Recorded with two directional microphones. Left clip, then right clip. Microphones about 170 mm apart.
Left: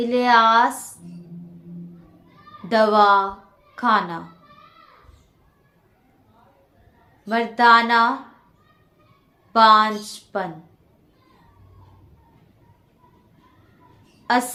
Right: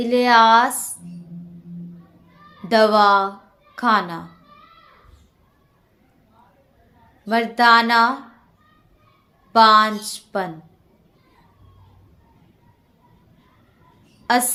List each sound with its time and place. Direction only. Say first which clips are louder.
0.0 s a woman's voice: right 2 dB; 45° right (ahead or behind)
2.6 s a woman's voice: right 1 dB; 40° right (ahead or behind)
7.3 s a woman's voice: even; 40° right (ahead or behind)
9.5 s a woman's voice: right 1 dB; 45° right (ahead or behind)
14.3 s a woman's voice: right 1 dB; 45° right (ahead or behind)